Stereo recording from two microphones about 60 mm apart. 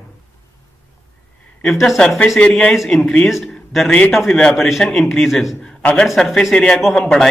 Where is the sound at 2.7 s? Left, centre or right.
Centre.